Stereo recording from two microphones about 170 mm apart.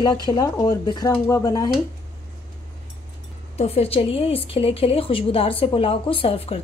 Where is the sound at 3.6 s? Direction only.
35° left (ahead or behind).